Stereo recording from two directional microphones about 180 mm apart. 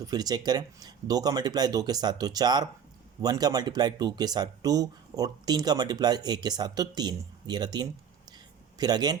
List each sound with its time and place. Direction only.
0.1 s speech: 20° right (ahead or behind)